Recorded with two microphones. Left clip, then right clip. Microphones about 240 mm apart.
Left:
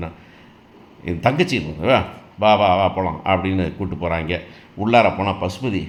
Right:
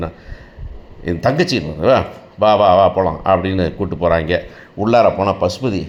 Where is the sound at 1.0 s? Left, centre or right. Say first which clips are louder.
Right 3 dB; centre.